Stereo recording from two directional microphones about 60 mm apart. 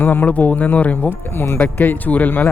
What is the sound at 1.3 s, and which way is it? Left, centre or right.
Speech, left.